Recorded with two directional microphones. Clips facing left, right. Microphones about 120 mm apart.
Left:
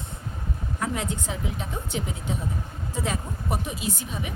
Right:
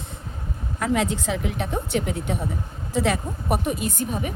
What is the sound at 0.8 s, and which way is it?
A woman's voice, 90° right.